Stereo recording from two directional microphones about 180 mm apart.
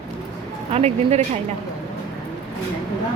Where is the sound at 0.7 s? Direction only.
35° right (ahead or behind).